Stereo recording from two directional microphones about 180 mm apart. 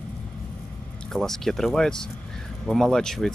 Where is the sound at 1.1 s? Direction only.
Centre (ahead or behind).